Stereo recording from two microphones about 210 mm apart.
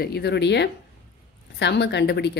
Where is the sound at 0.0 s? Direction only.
50° left (ahead or behind).